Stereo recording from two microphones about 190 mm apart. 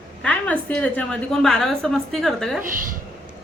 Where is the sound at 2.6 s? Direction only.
45° right (ahead or behind).